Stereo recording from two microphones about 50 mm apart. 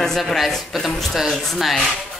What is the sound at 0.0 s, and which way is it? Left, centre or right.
A woman's voice, centre.